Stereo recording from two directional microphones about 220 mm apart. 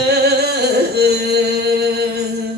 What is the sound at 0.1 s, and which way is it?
Music, 45° right (ahead or behind).